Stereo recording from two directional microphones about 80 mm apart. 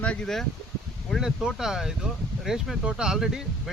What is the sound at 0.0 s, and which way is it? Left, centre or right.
Speech, centre.